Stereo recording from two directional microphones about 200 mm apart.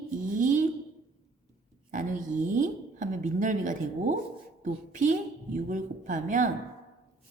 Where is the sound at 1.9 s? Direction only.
40° right (ahead or behind).